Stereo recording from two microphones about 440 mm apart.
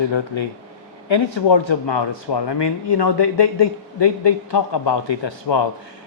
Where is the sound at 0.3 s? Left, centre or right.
Left.